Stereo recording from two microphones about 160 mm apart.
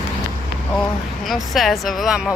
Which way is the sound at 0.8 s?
Centre (ahead or behind).